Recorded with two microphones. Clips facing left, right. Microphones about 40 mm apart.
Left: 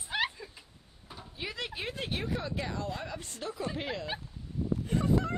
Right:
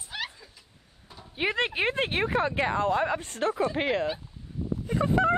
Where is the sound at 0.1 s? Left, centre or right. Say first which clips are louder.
Left 4 dB; centre.